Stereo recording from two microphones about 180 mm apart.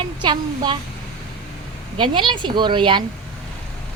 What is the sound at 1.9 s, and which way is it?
A woman's voice, 25° right (ahead or behind).